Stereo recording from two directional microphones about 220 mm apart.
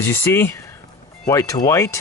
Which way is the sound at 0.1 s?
10° left (ahead or behind).